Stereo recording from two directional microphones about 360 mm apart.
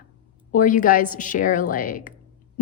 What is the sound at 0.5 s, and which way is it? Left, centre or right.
A woman's voice, left.